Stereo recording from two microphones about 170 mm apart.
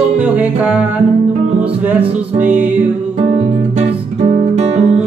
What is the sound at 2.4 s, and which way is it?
Music, 10° right (ahead or behind).